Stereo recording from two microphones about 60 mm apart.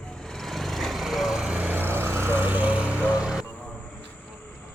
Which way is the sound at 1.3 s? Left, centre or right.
Centre.